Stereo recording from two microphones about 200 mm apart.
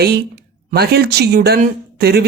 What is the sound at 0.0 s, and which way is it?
Speech, 50° right (ahead or behind).